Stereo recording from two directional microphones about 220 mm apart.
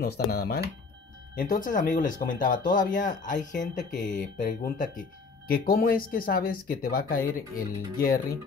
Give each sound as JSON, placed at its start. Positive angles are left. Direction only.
{"t": 0.0, "sound": "speech", "side_deg": 45}